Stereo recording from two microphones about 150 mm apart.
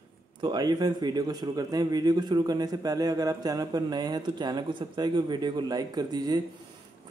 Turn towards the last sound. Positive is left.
turn(degrees=-25)  # may be behind; listen again after turning